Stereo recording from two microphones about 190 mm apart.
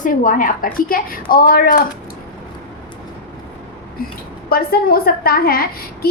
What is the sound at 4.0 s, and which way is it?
A woman's voice, 50° left (ahead or behind).